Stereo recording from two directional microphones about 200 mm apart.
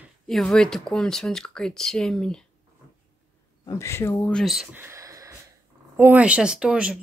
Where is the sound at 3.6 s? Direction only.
15° left (ahead or behind).